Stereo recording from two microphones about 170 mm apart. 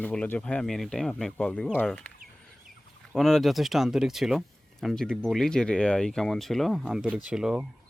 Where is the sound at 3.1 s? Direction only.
Centre (ahead or behind).